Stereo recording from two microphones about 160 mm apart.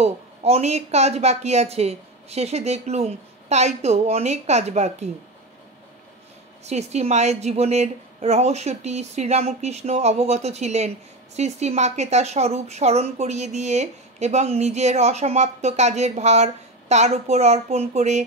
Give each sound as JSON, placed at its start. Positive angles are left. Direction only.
{"t": 0.0, "sound": "a woman's voice", "side_deg": -40}
{"t": 6.6, "sound": "a woman's voice", "side_deg": -45}